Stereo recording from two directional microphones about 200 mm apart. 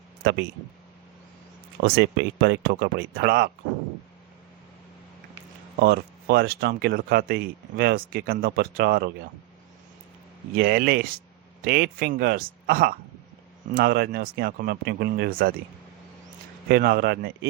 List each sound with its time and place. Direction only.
1.8 s speech: 55° right (ahead or behind)
5.8 s speech: 55° right (ahead or behind)
10.5 s speech: 50° right (ahead or behind)
16.6 s speech: 50° right (ahead or behind)